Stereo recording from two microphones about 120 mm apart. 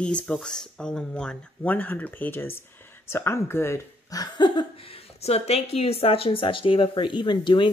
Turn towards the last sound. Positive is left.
turn(degrees=40)  # may be behind; listen again after turning